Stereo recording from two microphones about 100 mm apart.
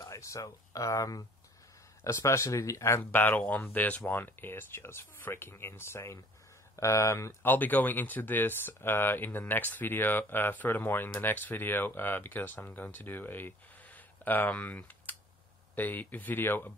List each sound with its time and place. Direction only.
0.0 s speech: 30° left (ahead or behind)
7.5 s speech: 20° left (ahead or behind)